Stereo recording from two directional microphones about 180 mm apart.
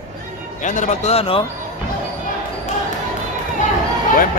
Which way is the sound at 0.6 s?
45° left (ahead or behind).